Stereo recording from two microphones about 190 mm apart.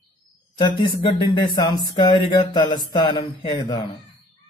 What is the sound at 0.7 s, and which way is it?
A man's voice, 15° left (ahead or behind).